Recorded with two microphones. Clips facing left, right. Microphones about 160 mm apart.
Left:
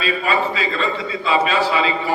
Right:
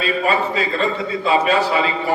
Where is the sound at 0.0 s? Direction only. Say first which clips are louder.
Right 1 dB; 45° right (ahead or behind).